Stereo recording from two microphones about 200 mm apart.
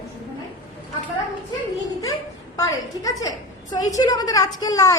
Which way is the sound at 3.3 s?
20° left (ahead or behind).